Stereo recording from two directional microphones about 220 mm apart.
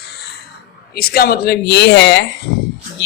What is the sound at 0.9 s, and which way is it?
A woman's voice, 45° left (ahead or behind).